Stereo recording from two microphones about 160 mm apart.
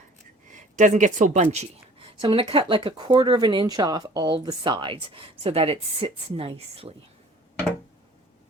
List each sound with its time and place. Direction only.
0.5 s speech: 50° right (ahead or behind)
2.2 s speech: 35° right (ahead or behind)